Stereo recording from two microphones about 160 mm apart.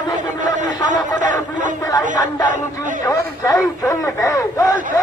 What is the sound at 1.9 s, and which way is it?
Speech, 25° left (ahead or behind).